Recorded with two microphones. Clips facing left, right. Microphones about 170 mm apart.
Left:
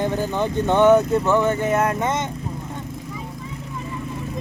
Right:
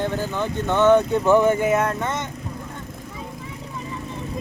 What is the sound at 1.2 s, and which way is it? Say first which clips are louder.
Speech: right 2 dB; 15° right (ahead or behind).